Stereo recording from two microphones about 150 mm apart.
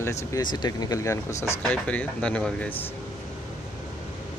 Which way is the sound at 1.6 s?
10° left (ahead or behind).